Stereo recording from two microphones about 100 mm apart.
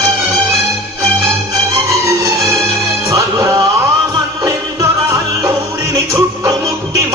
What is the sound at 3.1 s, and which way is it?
Music, 35° right (ahead or behind).